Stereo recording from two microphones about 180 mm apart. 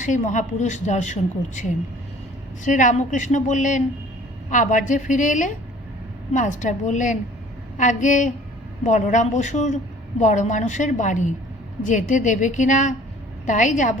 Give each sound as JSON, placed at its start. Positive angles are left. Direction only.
{"t": 0.0, "sound": "a woman's voice", "side_deg": 45}
{"t": 2.6, "sound": "a woman's voice", "side_deg": 45}